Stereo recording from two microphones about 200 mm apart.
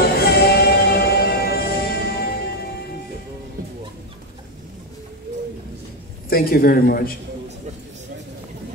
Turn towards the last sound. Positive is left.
turn(degrees=45)  # may be behind; listen again after turning